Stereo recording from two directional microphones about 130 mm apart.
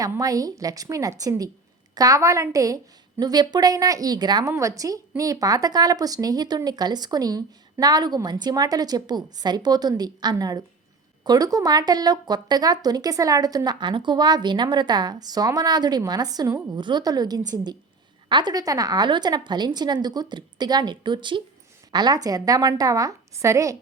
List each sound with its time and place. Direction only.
0.0 s a woman's voice: 25° right (ahead or behind)